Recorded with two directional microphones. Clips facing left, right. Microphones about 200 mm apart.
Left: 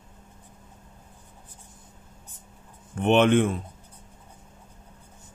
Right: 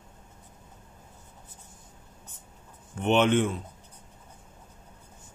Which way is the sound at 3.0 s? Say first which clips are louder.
Left 3 dB; 55° left (ahead or behind).